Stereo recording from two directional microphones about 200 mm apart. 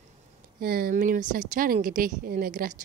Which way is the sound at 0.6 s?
50° right (ahead or behind).